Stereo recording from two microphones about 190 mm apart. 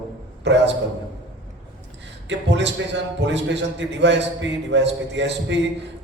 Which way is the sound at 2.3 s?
70° right (ahead or behind).